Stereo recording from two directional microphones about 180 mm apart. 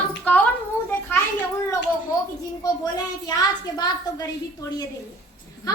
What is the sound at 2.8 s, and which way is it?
A woman's voice, 20° left (ahead or behind).